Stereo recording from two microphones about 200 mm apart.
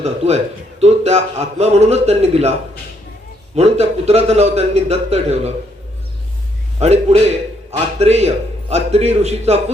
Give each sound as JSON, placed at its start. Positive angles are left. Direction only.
{"t": 0.0, "sound": "a man's voice", "side_deg": -30}
{"t": 6.7, "sound": "a man's voice", "side_deg": -30}